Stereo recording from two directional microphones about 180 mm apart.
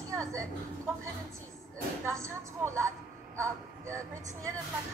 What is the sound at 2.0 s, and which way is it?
Speech, 15° right (ahead or behind).